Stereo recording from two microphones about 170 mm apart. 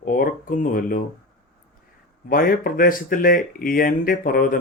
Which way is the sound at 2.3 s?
60° left (ahead or behind).